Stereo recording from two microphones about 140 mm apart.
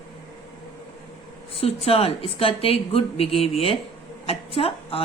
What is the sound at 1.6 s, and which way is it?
A woman's voice, 45° left (ahead or behind).